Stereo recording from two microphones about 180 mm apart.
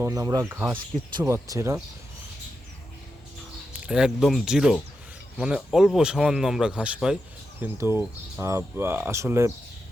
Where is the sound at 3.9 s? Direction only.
5° right (ahead or behind).